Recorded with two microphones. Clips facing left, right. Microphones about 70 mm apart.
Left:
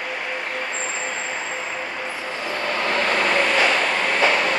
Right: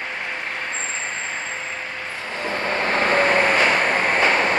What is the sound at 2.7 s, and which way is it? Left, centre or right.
Train, right.